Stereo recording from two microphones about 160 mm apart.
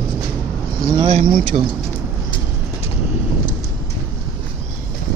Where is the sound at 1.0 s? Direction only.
40° right (ahead or behind).